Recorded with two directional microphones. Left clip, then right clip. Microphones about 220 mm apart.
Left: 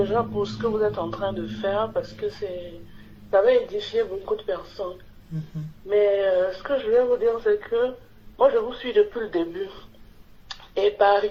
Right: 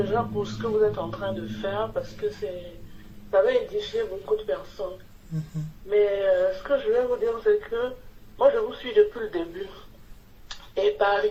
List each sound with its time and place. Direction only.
0.0 s speech: 40° left (ahead or behind)
3.3 s speech: 45° left (ahead or behind)
5.9 s speech: 45° left (ahead or behind)